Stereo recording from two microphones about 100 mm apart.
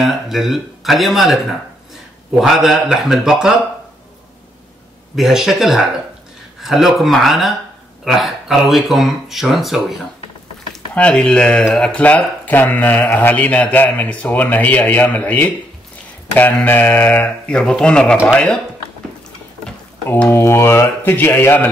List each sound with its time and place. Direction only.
0.0 s speech: centre (ahead or behind)
5.1 s speech: 5° right (ahead or behind)
10.7 s speech: 10° left (ahead or behind)
16.6 s speech: 15° left (ahead or behind)
20.2 s speech: 25° left (ahead or behind)